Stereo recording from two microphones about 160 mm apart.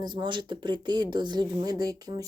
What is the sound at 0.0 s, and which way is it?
Speech, 25° right (ahead or behind).